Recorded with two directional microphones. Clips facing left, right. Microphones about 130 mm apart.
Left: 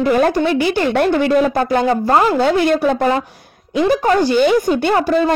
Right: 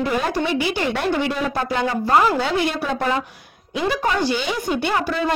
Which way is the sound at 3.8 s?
45° left (ahead or behind).